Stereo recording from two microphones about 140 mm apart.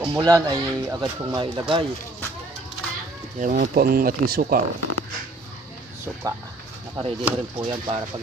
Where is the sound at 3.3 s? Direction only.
65° right (ahead or behind); by 4.5 s 90° right.